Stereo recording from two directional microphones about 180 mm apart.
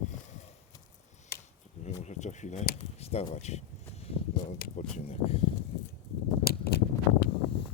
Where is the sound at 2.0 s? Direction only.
40° left (ahead or behind).